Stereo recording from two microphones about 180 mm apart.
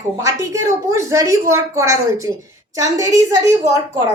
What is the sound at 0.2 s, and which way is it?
A woman's voice, 20° right (ahead or behind).